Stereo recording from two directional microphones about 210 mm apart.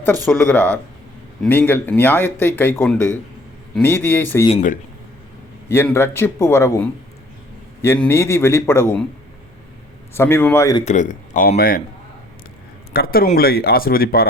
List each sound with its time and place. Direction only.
0.3 s speech: 5° left (ahead or behind)
4.4 s speech: 35° left (ahead or behind)
5.6 s speech: 10° left (ahead or behind)
10.2 s speech: 10° left (ahead or behind)
10.8 s speech: 35° left (ahead or behind)
12.9 s speech: 45° left (ahead or behind)